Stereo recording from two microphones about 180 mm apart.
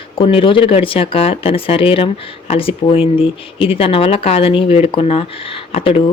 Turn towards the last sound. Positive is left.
turn(degrees=35)  # may be behind; listen again after turning